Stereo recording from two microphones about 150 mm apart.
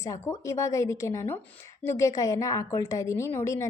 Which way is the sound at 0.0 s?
20° left (ahead or behind).